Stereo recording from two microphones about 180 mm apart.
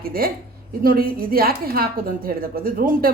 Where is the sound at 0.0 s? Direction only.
55° right (ahead or behind).